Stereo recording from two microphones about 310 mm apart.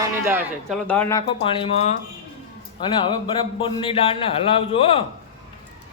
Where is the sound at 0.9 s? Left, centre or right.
Centre.